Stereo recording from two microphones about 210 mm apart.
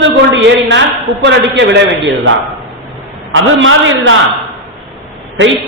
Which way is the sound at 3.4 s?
70° right (ahead or behind).